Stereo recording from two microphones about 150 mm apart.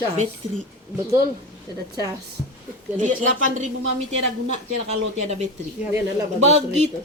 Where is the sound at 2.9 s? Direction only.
55° right (ahead or behind).